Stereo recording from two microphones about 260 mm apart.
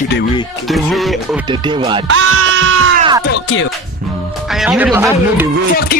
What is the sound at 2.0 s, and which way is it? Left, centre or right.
Music, right.